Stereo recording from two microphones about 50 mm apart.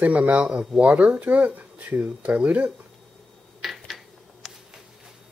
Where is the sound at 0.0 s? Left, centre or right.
Right.